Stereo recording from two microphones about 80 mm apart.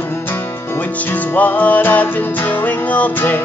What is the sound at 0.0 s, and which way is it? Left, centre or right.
Music, left.